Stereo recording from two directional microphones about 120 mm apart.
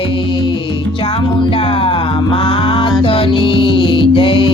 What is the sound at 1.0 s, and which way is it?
Music, 50° left (ahead or behind).